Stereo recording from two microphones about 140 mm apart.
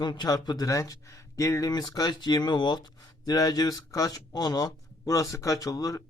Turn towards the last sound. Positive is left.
turn(degrees=25)  # may be behind; listen again after turning